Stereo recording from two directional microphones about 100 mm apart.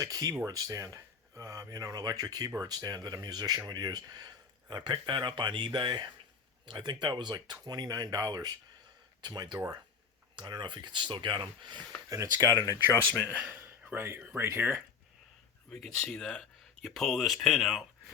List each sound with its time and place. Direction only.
0.0 s speech: 35° right (ahead or behind)
12.0 s speech: 30° right (ahead or behind)
12.5 s speech: 35° left (ahead or behind)
13.5 s speech: 20° right (ahead or behind)
15.7 s speech: 10° left (ahead or behind)